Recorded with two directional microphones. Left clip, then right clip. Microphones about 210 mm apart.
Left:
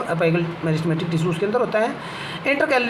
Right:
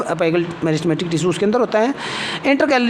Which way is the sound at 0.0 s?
50° right (ahead or behind).